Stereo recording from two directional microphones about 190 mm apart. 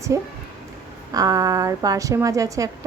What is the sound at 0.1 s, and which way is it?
A woman's voice, 15° right (ahead or behind).